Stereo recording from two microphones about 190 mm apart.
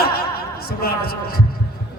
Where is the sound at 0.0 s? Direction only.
55° left (ahead or behind).